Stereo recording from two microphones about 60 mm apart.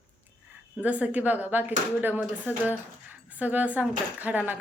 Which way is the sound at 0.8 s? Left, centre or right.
Right.